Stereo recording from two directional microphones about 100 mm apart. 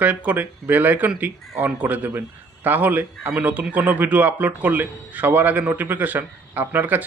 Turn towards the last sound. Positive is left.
turn(degrees=-20)  # may be behind; listen again after turning